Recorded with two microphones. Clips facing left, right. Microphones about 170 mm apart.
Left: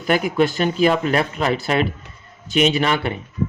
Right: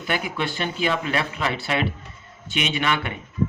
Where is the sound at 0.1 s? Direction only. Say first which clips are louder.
Left 9 dB; 45° left (ahead or behind).